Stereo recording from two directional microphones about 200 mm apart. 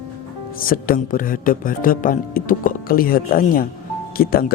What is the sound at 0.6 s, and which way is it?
Speech, 45° left (ahead or behind).